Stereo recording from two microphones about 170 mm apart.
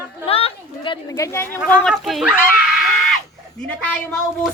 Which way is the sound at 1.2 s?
15° left (ahead or behind).